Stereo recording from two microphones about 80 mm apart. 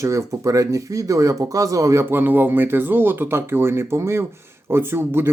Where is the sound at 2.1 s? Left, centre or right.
Right.